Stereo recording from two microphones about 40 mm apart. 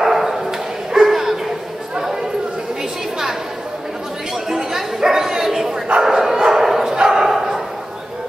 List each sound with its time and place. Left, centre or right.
0.0 s dog: centre
4.5 s bow-wow: centre